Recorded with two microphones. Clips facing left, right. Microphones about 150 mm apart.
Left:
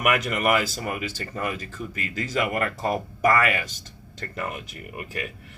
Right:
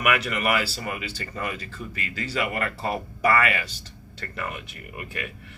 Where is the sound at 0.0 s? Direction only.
45° left (ahead or behind).